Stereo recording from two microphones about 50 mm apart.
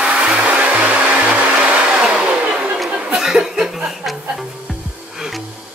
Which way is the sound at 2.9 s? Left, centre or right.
Centre.